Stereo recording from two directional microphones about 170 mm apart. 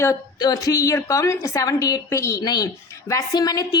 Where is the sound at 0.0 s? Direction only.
20° left (ahead or behind).